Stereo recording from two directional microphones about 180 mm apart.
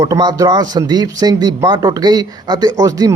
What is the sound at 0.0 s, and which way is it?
Speech, 20° right (ahead or behind).